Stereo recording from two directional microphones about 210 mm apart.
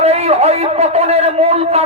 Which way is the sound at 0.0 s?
30° right (ahead or behind).